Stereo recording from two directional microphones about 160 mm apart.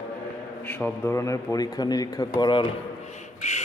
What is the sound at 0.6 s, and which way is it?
Speech, 10° left (ahead or behind).